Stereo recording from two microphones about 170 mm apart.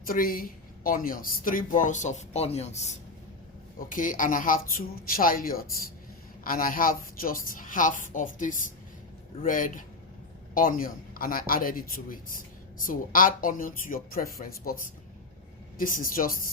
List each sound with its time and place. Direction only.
0.0 s speech: 55° left (ahead or behind); by 2.9 s 40° left (ahead or behind)
3.8 s a woman's voice: 50° left (ahead or behind)